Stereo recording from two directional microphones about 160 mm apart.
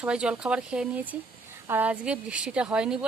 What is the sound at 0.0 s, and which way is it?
A woman's voice, 5° right (ahead or behind).